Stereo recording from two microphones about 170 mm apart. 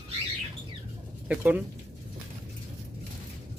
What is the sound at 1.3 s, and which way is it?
Speech, 10° right (ahead or behind).